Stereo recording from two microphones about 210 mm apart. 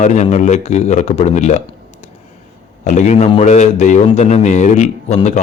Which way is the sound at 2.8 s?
35° left (ahead or behind).